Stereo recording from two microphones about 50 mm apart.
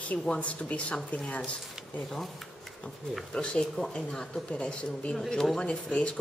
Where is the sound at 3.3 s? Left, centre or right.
Centre.